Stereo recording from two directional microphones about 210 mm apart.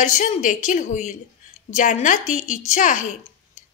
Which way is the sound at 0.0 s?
35° left (ahead or behind).